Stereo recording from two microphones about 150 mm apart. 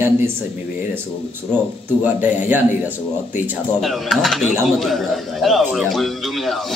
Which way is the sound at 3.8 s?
Centre (ahead or behind).